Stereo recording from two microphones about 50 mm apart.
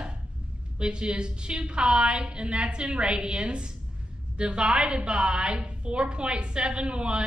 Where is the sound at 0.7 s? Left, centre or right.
Centre.